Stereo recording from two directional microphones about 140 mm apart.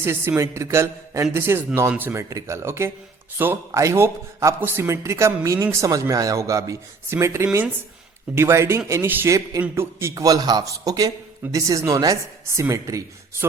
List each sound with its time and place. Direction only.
0.0 s a man's voice: 15° right (ahead or behind)